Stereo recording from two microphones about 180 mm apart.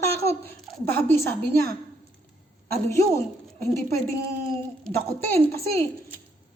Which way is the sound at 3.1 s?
15° left (ahead or behind).